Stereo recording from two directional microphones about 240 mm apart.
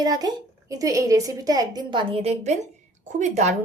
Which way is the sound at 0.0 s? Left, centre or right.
Centre.